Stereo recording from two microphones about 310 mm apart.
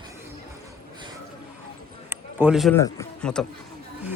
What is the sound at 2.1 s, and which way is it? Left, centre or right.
A man's voice, centre.